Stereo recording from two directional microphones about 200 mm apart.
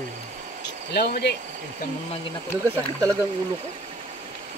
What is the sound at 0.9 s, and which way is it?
Speech, 55° left (ahead or behind).